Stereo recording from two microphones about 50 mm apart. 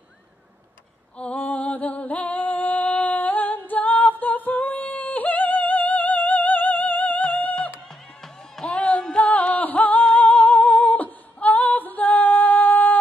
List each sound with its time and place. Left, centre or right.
1.1 s a sound: left
2.1 s singing: left
8.6 s music: left
10.0 s singing: left
10.5 s female singing: left